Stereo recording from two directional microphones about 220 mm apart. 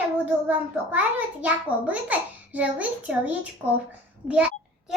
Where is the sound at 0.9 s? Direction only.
5° right (ahead or behind).